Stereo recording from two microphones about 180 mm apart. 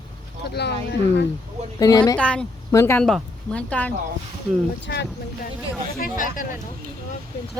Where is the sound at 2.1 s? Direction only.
5° left (ahead or behind).